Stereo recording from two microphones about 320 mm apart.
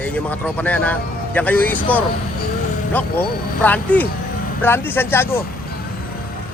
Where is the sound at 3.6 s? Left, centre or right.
Centre.